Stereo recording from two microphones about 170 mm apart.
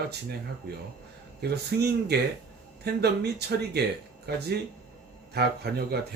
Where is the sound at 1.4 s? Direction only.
70° right (ahead or behind).